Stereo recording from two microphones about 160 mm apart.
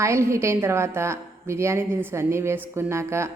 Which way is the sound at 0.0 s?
15° right (ahead or behind).